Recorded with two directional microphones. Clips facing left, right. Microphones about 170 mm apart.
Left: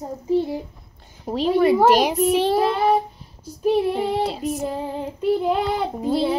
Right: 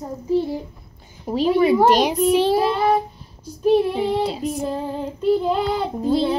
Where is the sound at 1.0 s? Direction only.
Centre (ahead or behind).